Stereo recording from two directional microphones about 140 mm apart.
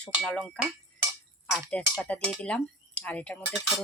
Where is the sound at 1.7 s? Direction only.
5° left (ahead or behind).